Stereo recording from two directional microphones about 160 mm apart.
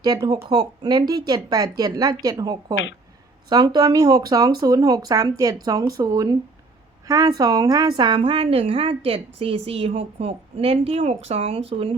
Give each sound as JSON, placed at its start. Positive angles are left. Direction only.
{"t": 0.0, "sound": "a woman's voice", "side_deg": -25}